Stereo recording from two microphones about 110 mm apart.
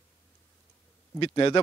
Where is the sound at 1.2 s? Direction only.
50° left (ahead or behind).